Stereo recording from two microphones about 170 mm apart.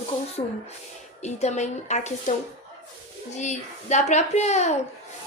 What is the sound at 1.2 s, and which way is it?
A woman's voice, 40° left (ahead or behind).